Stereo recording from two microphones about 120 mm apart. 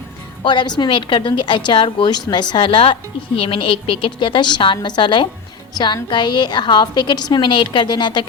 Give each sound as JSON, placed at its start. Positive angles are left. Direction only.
{"t": 0.4, "sound": "a woman's voice", "side_deg": 40}